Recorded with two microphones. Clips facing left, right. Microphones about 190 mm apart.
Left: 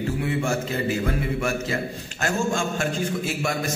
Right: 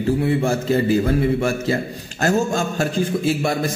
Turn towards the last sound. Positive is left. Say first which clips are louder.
# right 6 dB
turn(degrees=-35)  # may be behind; listen again after turning